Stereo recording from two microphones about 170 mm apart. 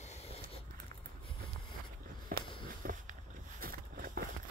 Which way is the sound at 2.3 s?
55° right (ahead or behind).